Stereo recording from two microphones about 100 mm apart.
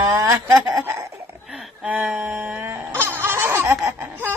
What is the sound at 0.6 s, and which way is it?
Chuckle, 30° right (ahead or behind).